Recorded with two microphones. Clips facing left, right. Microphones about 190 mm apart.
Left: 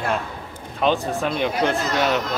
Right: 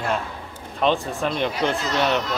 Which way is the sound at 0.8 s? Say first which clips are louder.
Left 1 dB; centre (ahead or behind).